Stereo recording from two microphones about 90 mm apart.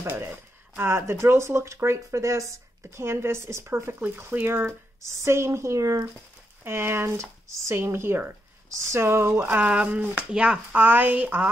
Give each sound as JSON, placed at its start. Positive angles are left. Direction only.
{"t": 0.0, "sound": "speech", "side_deg": -25}